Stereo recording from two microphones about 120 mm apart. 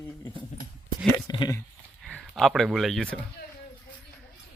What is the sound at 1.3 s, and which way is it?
Speech, 35° left (ahead or behind).